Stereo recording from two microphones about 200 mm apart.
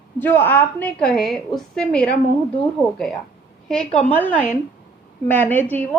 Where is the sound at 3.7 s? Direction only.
5° left (ahead or behind).